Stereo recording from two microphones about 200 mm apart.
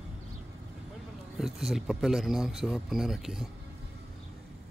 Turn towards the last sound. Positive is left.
turn(degrees=0)  # may be behind; listen again after turning